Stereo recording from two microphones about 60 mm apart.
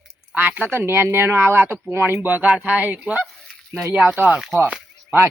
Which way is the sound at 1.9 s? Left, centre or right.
Right.